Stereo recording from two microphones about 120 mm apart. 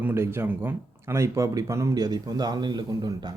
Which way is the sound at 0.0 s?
20° right (ahead or behind).